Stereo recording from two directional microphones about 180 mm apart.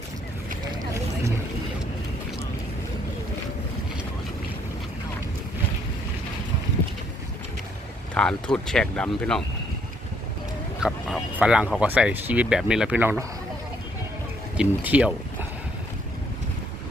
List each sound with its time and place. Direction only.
0.7 s a sound: 15° right (ahead or behind)
8.1 s speech: 5° left (ahead or behind)
10.8 s speech: 5° right (ahead or behind)
14.5 s speech: 5° right (ahead or behind)